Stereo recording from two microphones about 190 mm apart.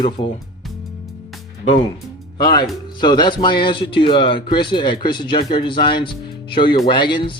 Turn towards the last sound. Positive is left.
turn(degrees=25)  # may be behind; listen again after turning